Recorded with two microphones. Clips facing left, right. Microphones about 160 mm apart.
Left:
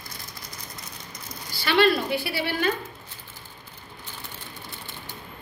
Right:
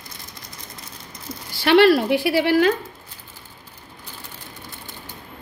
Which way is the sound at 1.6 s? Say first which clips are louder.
Right 7 dB; 75° right (ahead or behind).